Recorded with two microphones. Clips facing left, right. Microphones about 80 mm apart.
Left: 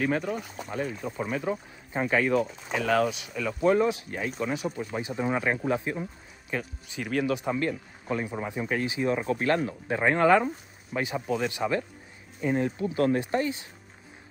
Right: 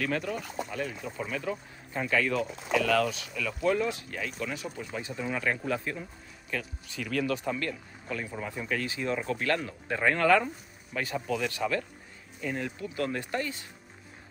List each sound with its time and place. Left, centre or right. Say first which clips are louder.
0.0 s speech: left 3 dB; left
4.6 s speech: left 6 dB; centre
5.1 s speech: left 4 dB; left
13.2 s speech: left 5 dB; left